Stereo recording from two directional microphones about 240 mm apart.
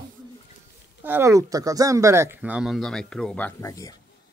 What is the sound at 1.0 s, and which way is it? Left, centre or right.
Speech, centre.